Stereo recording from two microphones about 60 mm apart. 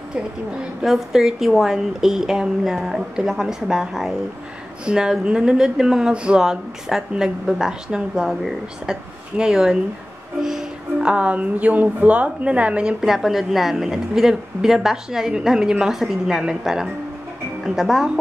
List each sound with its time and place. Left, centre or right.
0.8 s a woman's voice: centre
9.4 s a woman's voice: centre
13.0 s a woman's voice: centre